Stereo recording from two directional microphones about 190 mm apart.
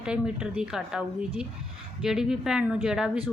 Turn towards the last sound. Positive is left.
turn(degrees=-5)  # may be behind; listen again after turning